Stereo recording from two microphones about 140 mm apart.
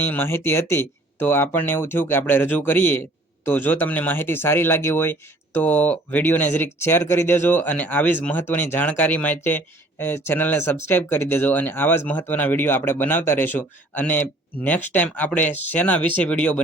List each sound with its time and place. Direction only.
0.0 s speech: 15° left (ahead or behind)